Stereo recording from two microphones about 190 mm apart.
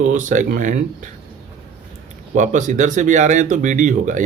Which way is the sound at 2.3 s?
40° right (ahead or behind).